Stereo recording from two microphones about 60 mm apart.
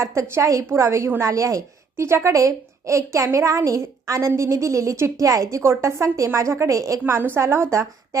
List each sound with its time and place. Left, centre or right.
0.0 s a woman's voice: right
7.0 s a woman's voice: right